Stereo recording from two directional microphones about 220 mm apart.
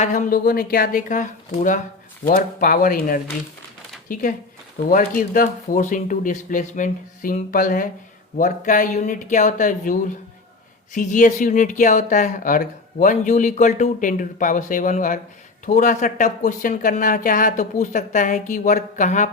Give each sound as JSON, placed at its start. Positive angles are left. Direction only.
{"t": 0.0, "sound": "speech", "side_deg": 35}